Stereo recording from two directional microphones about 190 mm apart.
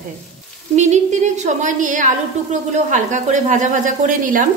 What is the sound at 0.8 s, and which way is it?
A woman's voice, 35° right (ahead or behind).